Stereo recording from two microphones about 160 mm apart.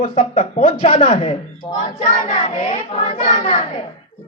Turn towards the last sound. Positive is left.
turn(degrees=45)  # may be behind; listen again after turning